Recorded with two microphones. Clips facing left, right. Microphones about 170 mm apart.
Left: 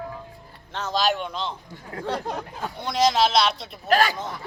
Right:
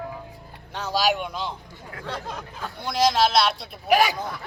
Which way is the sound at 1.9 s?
30° left (ahead or behind).